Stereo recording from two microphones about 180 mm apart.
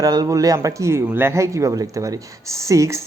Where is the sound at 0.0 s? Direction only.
20° right (ahead or behind).